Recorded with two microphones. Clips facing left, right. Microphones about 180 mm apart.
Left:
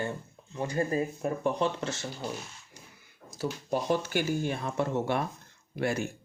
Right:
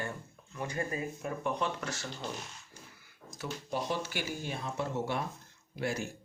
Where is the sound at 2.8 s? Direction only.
15° left (ahead or behind).